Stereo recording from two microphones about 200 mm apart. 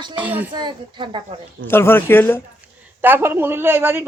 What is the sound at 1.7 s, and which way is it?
Speech, 10° left (ahead or behind).